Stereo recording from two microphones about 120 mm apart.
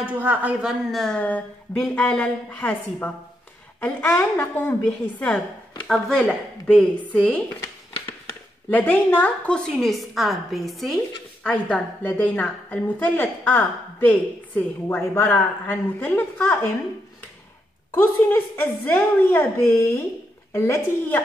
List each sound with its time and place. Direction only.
0.0 s a woman's voice: 15° right (ahead or behind); by 4.7 s 20° left (ahead or behind)
4.8 s a woman's voice: 10° left (ahead or behind)
8.6 s speech: 15° left (ahead or behind)
11.4 s a woman's voice: 10° left (ahead or behind)
17.9 s a woman's voice: 15° left (ahead or behind)